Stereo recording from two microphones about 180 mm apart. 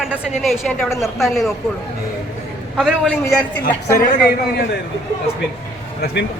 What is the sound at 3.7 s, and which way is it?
Speech, 15° left (ahead or behind).